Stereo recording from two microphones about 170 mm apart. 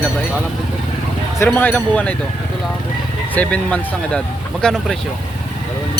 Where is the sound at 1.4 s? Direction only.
10° left (ahead or behind).